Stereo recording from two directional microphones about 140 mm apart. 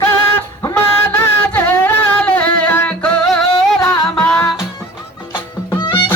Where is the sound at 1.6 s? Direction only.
10° left (ahead or behind).